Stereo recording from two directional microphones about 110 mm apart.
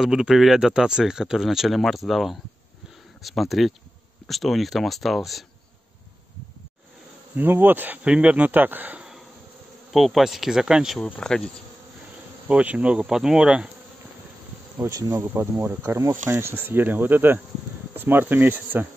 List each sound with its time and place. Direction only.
0.0 s speech: 5° right (ahead or behind)
7.3 s speech: 20° right (ahead or behind)
11.1 s insect: 5° left (ahead or behind)
12.4 s speech: 10° right (ahead or behind)
14.8 s speech: 30° right (ahead or behind)